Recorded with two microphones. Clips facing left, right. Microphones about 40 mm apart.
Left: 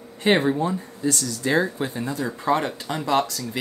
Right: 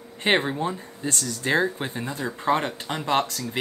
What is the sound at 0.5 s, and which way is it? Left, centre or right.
Speech, right.